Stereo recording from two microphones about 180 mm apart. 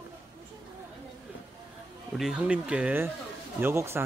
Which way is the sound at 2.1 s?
5° right (ahead or behind).